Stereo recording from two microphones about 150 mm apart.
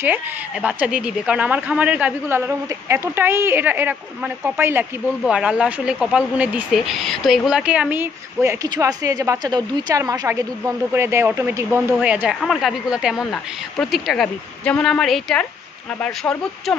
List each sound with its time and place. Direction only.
0.0 s a woman's voice: 10° right (ahead or behind)
5.2 s a woman's voice: 5° right (ahead or behind)